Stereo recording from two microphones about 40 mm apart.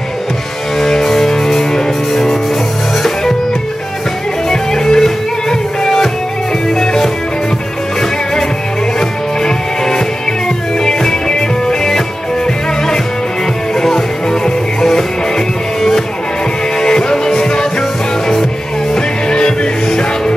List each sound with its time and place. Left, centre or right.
0.7 s music: centre
4.5 s music: centre
9.4 s music: centre
13.7 s music: centre
16.8 s music: centre
18.9 s music: centre